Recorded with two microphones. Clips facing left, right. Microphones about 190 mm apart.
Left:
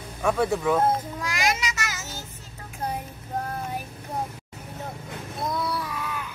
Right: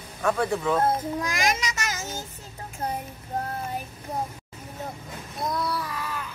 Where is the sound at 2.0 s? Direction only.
15° right (ahead or behind).